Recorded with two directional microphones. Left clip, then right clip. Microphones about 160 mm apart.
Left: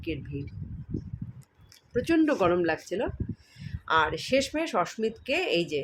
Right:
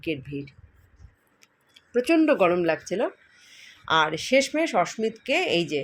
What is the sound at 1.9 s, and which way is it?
Speech, 10° right (ahead or behind).